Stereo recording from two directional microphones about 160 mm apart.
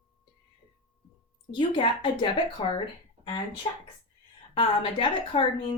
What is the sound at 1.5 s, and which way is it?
A woman's voice, 30° left (ahead or behind).